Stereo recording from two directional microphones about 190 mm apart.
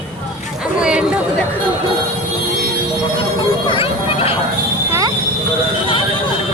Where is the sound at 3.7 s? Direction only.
30° left (ahead or behind).